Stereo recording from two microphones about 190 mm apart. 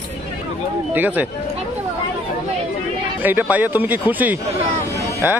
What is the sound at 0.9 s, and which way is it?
Speech, 10° right (ahead or behind).